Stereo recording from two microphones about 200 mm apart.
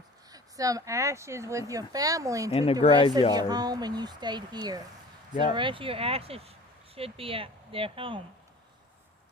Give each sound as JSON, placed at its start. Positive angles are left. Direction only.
{"t": 0.3, "sound": "speech", "side_deg": -15}
{"t": 2.5, "sound": "speech", "side_deg": 30}
{"t": 3.3, "sound": "speech", "side_deg": -20}